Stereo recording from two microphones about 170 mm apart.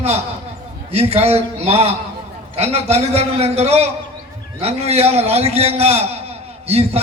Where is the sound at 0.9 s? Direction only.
35° right (ahead or behind).